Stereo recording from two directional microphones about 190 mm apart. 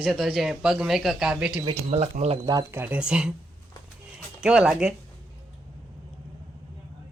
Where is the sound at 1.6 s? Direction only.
30° right (ahead or behind).